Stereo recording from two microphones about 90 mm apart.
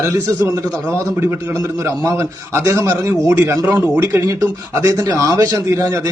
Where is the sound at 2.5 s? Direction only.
30° right (ahead or behind).